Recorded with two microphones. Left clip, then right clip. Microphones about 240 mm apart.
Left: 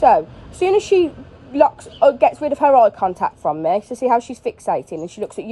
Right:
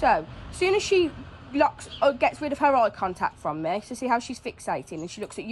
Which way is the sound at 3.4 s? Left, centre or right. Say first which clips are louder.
Left 9 dB; right.